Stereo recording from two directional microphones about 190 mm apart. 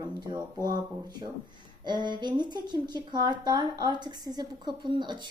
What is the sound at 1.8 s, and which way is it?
Speech, 25° right (ahead or behind).